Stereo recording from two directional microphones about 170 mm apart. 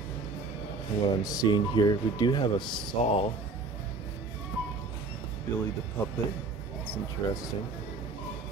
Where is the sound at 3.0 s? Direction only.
40° left (ahead or behind).